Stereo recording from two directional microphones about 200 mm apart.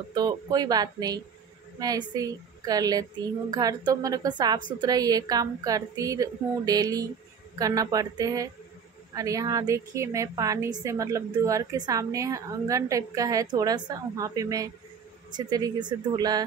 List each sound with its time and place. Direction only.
0.1 s a woman's voice: 20° right (ahead or behind)